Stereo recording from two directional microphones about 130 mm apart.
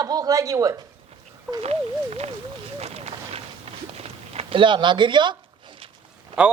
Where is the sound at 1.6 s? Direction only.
55° right (ahead or behind).